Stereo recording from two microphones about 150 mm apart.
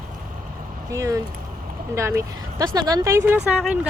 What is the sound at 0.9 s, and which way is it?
Speech, 20° right (ahead or behind).